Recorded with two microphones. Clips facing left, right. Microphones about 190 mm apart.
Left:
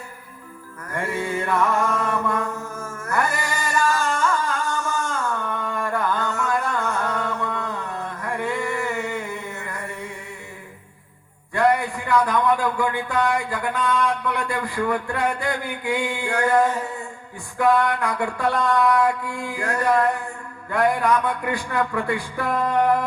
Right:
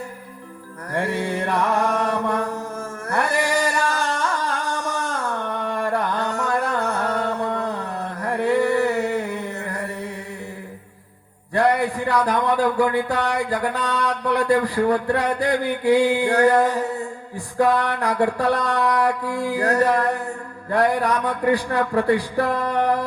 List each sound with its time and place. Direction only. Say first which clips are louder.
0.9 s music: right 2 dB; 35° right (ahead or behind)
11.5 s a man's voice: right 1 dB; 35° right (ahead or behind)
17.3 s a sound: even; 35° right (ahead or behind)